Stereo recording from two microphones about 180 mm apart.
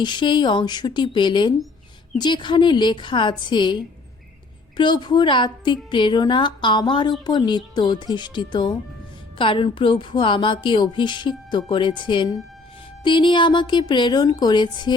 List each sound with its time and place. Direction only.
0.0 s a woman's voice: 25° left (ahead or behind)
4.8 s a woman's voice: 25° left (ahead or behind)